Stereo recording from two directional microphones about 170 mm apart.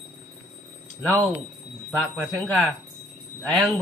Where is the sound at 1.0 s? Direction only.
10° right (ahead or behind).